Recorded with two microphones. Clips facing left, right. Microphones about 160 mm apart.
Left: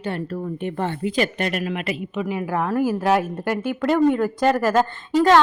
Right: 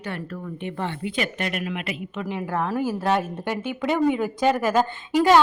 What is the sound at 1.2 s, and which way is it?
Speech, 35° left (ahead or behind).